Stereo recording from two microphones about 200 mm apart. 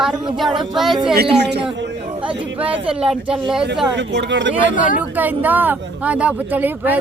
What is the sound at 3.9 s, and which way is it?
Speech, 60° right (ahead or behind).